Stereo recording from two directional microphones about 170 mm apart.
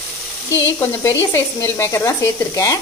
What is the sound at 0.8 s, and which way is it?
Speech, 15° left (ahead or behind).